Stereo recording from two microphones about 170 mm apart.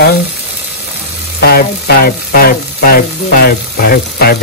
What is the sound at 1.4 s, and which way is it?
Frying, 65° left (ahead or behind).